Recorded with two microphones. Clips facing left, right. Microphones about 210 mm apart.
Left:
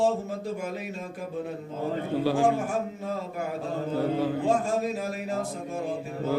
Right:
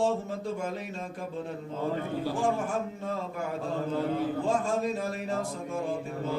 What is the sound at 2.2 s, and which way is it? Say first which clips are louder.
Music: left 6 dB; 75° left (ahead or behind).